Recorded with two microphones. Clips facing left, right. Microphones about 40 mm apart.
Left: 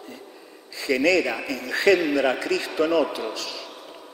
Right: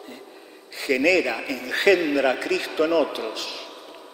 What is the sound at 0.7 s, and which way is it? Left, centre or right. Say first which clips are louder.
A man's voice: right 1 dB; right.